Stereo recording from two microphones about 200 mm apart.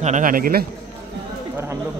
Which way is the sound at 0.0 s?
40° right (ahead or behind).